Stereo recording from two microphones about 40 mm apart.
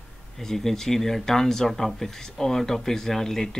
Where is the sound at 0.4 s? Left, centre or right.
Centre.